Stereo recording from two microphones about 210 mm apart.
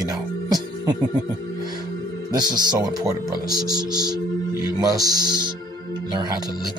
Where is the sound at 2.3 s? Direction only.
20° right (ahead or behind).